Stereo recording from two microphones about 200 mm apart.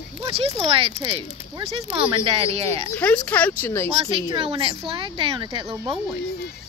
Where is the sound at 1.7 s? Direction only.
25° right (ahead or behind).